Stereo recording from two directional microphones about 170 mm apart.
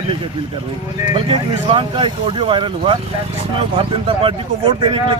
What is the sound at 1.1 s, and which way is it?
Speech, 30° right (ahead or behind).